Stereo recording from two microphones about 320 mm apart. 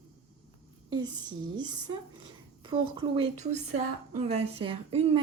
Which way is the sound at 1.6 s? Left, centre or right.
Centre.